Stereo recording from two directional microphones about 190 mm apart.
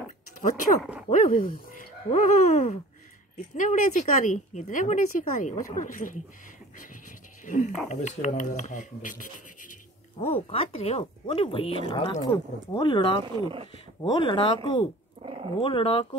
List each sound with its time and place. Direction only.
0.4 s speech: 45° left (ahead or behind)
7.4 s speech: 40° left (ahead or behind)
10.1 s speech: 30° left (ahead or behind)